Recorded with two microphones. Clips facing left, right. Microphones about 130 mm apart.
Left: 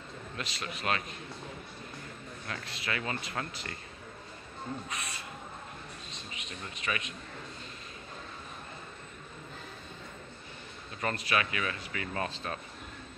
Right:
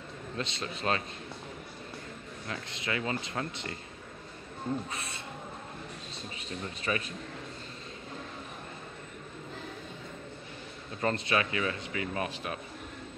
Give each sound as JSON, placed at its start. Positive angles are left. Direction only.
{"t": 0.4, "sound": "speech", "side_deg": -25}
{"t": 2.4, "sound": "speech", "side_deg": -20}
{"t": 4.8, "sound": "speech", "side_deg": -30}
{"t": 6.3, "sound": "speech", "side_deg": -35}
{"t": 11.0, "sound": "speech", "side_deg": -25}